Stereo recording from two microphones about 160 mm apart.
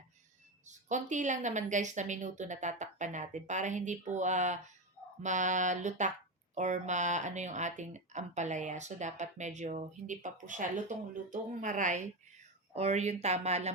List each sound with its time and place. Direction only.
0.6 s speech: 50° right (ahead or behind)